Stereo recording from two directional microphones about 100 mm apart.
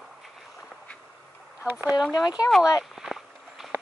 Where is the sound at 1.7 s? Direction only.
20° right (ahead or behind).